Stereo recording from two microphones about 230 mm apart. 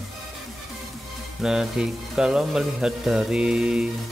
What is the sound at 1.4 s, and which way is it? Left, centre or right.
Speech, centre.